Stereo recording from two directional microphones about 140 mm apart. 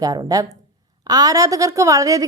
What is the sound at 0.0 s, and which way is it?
A woman's voice, 25° right (ahead or behind).